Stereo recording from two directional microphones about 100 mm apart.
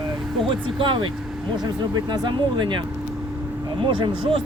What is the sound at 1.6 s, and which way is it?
Speech, 40° right (ahead or behind).